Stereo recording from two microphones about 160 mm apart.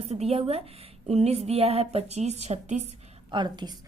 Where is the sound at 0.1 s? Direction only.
40° right (ahead or behind).